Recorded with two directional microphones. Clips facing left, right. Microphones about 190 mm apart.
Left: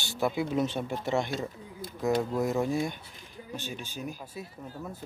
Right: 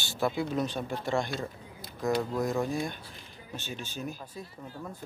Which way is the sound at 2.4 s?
25° left (ahead or behind).